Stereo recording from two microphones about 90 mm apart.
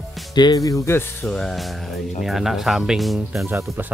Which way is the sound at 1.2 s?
5° left (ahead or behind).